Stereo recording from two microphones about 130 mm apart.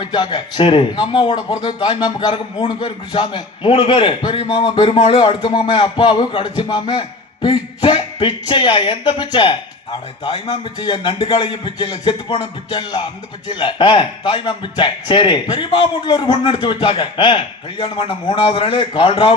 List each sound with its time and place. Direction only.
0.0 s a man's voice: 35° left (ahead or behind)